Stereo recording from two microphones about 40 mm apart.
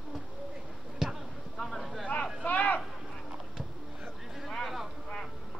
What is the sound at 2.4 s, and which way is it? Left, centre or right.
Vehicle, left.